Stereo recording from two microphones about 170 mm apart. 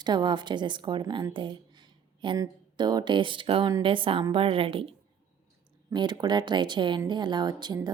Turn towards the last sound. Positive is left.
turn(degrees=-25)  # may be behind; listen again after turning